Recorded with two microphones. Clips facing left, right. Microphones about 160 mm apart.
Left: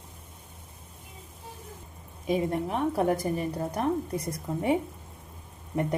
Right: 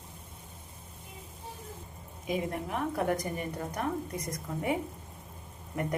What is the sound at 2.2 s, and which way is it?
A woman's voice, 30° left (ahead or behind).